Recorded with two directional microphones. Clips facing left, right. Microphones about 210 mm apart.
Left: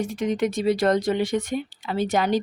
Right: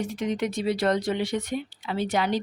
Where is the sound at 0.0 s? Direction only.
45° left (ahead or behind).